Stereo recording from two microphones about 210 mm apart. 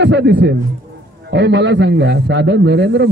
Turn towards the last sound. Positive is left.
turn(degrees=-55)  # may be behind; listen again after turning